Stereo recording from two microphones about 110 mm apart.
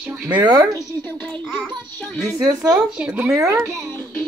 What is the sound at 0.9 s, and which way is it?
Speech, 20° left (ahead or behind).